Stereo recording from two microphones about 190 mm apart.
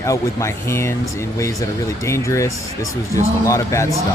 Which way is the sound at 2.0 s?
15° left (ahead or behind).